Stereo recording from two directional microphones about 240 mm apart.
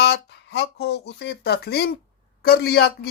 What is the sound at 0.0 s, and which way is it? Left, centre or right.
Speech, left.